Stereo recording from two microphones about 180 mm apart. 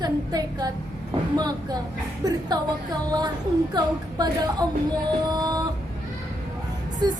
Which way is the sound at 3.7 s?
20° right (ahead or behind).